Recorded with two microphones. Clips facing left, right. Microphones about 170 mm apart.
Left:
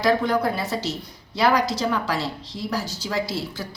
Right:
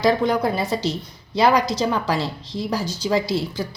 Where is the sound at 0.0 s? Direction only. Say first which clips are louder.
Right 2 dB; 20° right (ahead or behind).